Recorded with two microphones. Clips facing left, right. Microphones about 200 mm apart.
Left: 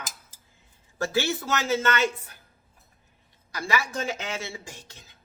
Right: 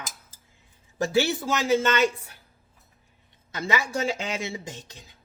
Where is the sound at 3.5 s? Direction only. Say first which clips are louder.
Right 1 dB; 20° right (ahead or behind).